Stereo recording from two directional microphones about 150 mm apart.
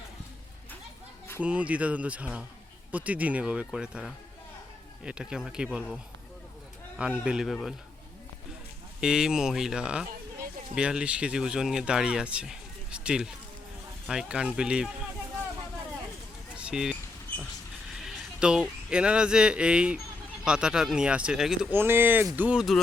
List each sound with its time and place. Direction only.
1.4 s speech: 10° right (ahead or behind)
7.3 s speech: centre (ahead or behind)
9.0 s speech: 5° right (ahead or behind)
16.6 s speech: 5° right (ahead or behind)
18.0 s speech: 5° right (ahead or behind)
21.7 s speech: 15° right (ahead or behind)